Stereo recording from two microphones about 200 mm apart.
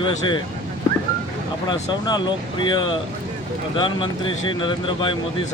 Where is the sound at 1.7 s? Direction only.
20° left (ahead or behind).